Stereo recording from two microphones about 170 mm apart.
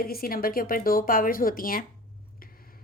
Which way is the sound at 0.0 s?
60° left (ahead or behind).